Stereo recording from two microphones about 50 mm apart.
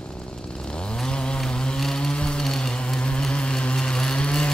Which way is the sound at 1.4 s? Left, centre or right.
Centre.